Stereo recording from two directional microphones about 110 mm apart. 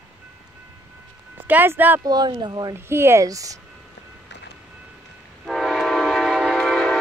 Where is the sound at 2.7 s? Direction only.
20° right (ahead or behind).